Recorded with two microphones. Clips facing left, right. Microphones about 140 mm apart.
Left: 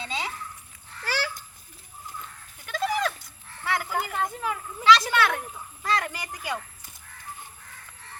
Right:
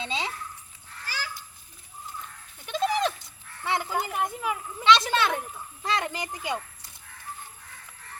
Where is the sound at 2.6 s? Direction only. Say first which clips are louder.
Right 1 dB; 25° right (ahead or behind).